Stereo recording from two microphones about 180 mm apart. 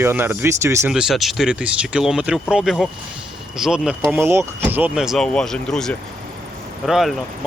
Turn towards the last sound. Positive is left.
turn(degrees=0)  # may be behind; listen again after turning